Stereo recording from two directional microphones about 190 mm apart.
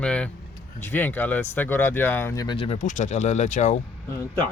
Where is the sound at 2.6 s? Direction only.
35° left (ahead or behind).